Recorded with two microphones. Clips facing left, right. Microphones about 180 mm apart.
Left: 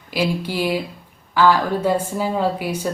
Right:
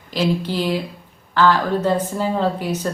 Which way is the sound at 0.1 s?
10° left (ahead or behind).